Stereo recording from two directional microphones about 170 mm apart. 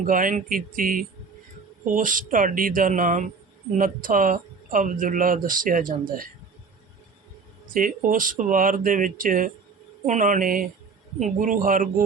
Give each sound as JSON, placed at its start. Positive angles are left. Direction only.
{"t": 0.0, "sound": "speech", "side_deg": -50}
{"t": 7.7, "sound": "speech", "side_deg": -55}